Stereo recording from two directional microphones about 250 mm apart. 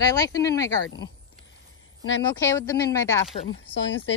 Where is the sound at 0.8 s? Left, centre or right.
Left.